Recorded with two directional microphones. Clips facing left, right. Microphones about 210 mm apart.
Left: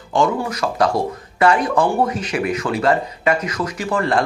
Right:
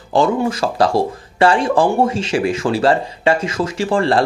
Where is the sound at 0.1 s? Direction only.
30° right (ahead or behind).